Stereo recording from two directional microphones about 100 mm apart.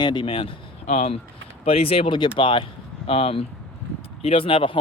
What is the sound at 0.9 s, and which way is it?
Speech, 90° left.